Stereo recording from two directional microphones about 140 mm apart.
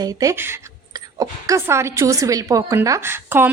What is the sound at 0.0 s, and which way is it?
A woman's voice, 25° right (ahead or behind).